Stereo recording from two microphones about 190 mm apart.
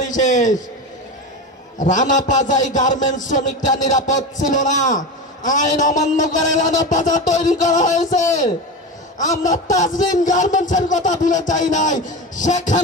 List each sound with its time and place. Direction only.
0.0 s a sound: 40° left (ahead or behind)
1.8 s a man's voice: 40° left (ahead or behind)
9.2 s a man's voice: 40° left (ahead or behind)